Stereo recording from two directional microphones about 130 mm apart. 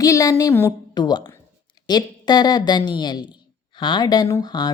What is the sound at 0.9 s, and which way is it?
Speech, 30° left (ahead or behind).